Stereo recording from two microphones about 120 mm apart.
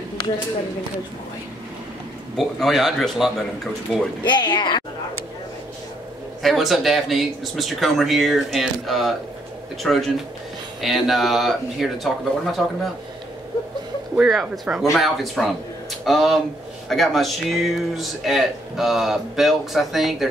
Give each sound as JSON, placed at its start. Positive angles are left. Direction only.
{"t": 2.3, "sound": "speech", "side_deg": 0}
{"t": 4.2, "sound": "a woman's voice", "side_deg": 40}
{"t": 6.4, "sound": "speech", "side_deg": 0}
{"t": 14.1, "sound": "speech", "side_deg": -5}